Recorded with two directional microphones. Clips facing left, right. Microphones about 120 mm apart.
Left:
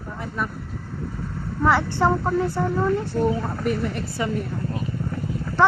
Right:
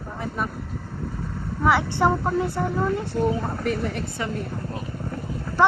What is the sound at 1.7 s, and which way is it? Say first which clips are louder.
Speech: even; 10° right (ahead or behind).